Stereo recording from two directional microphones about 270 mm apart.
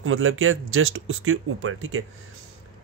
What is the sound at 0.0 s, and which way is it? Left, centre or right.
Speech, right.